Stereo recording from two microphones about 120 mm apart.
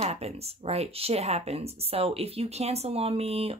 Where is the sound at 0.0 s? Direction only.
60° right (ahead or behind).